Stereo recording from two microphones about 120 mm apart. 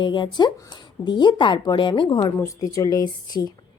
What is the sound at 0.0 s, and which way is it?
Speech, 40° left (ahead or behind).